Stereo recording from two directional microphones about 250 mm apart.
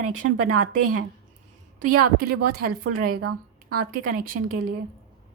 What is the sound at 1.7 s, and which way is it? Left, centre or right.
Speech, right.